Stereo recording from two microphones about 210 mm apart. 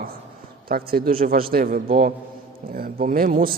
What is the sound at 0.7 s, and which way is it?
A man's voice, 45° right (ahead or behind).